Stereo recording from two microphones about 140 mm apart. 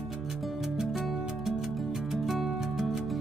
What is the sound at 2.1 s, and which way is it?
Music, centre (ahead or behind).